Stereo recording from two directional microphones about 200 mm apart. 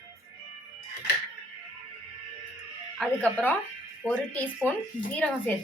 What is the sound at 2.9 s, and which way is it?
A woman's voice, 5° left (ahead or behind).